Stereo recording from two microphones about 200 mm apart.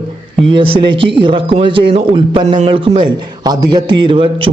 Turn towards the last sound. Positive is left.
turn(degrees=-25)  # may be behind; listen again after turning